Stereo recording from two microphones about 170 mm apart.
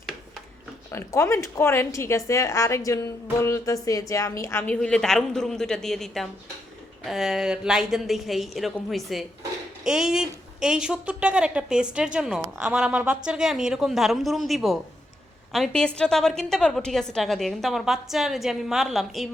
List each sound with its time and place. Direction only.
0.9 s a woman's voice: 15° left (ahead or behind); by 19.3 s centre (ahead or behind)